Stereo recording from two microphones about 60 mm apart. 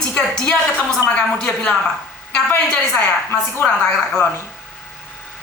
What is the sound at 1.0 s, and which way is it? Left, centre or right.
Speech, centre.